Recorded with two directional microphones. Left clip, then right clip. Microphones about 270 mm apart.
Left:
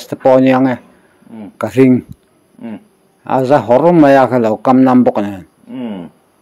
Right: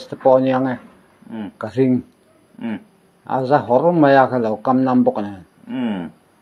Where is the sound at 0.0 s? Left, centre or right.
Left.